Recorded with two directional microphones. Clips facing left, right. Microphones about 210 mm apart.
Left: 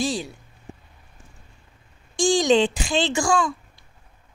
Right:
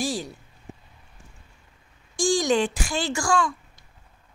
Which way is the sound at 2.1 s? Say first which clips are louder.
Left 4 dB; 20° left (ahead or behind).